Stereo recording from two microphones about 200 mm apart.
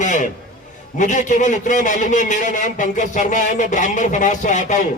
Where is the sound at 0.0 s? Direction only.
40° left (ahead or behind).